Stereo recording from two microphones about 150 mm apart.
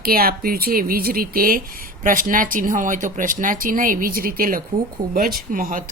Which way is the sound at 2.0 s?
65° right (ahead or behind).